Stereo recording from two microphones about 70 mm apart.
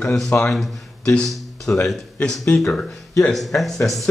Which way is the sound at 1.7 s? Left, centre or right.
Left.